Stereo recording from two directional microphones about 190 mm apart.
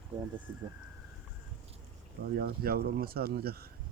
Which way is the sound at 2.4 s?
55° right (ahead or behind).